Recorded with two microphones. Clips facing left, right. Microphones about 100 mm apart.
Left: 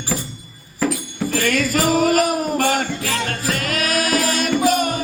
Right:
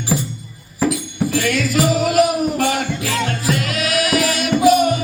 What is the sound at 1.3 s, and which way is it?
Music, 45° left (ahead or behind).